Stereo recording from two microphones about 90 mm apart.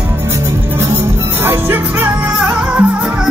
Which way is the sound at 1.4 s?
25° right (ahead or behind).